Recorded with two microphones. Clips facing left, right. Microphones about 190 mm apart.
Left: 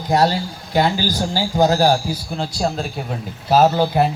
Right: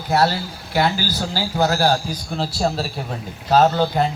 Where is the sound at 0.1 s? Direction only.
15° left (ahead or behind).